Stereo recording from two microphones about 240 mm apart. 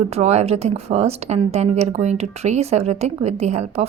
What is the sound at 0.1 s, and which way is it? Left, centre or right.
A woman's voice, right.